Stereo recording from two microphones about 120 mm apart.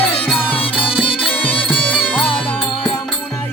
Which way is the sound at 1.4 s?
50° left (ahead or behind).